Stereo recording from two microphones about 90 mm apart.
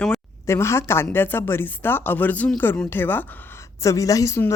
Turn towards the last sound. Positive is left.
turn(degrees=30)  # may be behind; listen again after turning